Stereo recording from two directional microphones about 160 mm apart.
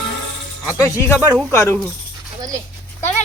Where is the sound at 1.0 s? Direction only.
15° left (ahead or behind).